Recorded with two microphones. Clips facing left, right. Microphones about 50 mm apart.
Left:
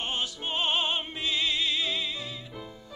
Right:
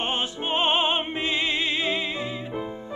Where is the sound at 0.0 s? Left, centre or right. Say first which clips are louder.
Right 5 dB; right.